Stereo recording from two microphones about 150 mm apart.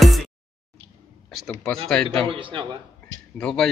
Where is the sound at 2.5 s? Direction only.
30° right (ahead or behind).